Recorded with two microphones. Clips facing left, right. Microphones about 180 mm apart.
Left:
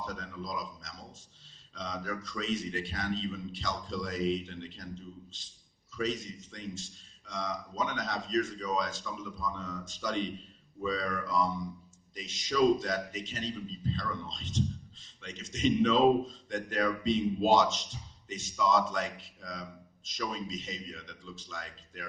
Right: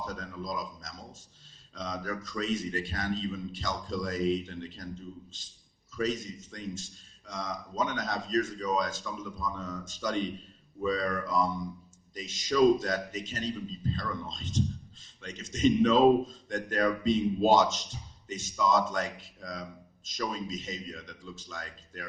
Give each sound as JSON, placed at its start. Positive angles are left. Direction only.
{"t": 0.2, "sound": "a man's voice", "side_deg": -45}
{"t": 6.0, "sound": "a man's voice", "side_deg": -45}